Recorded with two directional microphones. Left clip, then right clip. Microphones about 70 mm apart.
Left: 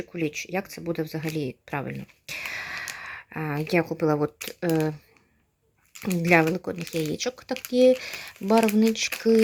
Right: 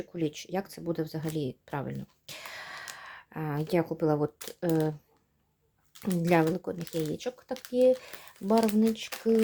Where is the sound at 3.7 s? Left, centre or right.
Centre.